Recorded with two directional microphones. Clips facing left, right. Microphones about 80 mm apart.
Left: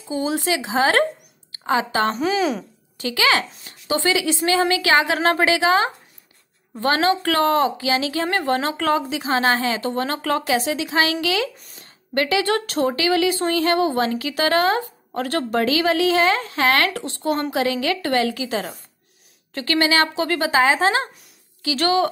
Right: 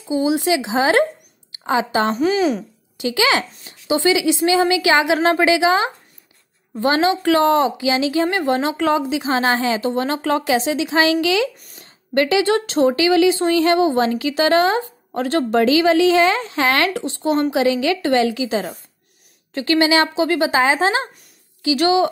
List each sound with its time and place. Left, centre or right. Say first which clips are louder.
0.1 s speech: right 5 dB; centre
2.1 s a woman's voice: right 3 dB; centre
3.0 s a woman's voice: right 2 dB; centre